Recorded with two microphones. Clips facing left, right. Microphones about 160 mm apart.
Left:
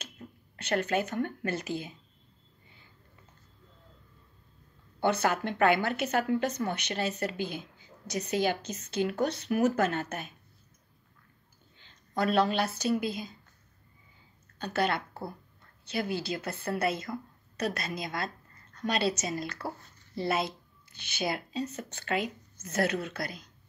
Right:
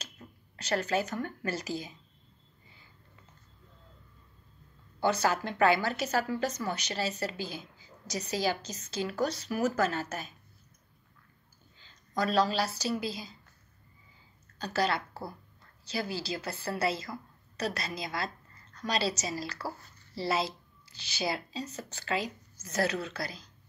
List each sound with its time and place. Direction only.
0.8 s speech: 55° left (ahead or behind)
5.0 s a woman's voice: 55° left (ahead or behind)
11.8 s a woman's voice: 55° left (ahead or behind)
14.6 s a woman's voice: 55° left (ahead or behind)
15.0 s speech: 25° left (ahead or behind)
15.8 s a woman's voice: 55° left (ahead or behind)